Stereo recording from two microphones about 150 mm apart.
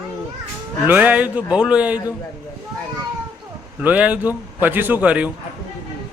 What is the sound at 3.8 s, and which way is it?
A man's voice, 10° right (ahead or behind).